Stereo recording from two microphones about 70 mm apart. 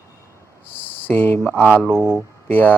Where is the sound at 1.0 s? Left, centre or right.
Left.